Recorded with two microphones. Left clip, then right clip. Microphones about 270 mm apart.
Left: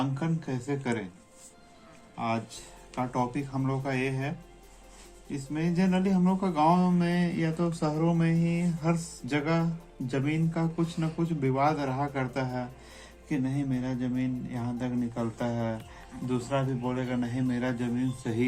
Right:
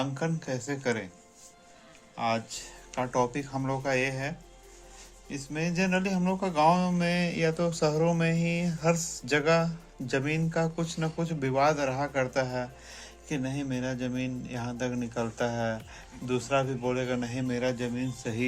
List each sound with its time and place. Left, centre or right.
0.0 s speech: right
2.1 s speech: right